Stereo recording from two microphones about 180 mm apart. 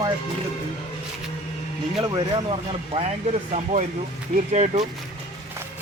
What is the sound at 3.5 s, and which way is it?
Speech, 40° right (ahead or behind).